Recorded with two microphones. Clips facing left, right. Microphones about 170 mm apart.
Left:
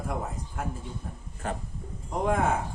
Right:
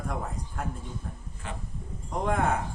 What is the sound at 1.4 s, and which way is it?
Speech, 45° left (ahead or behind).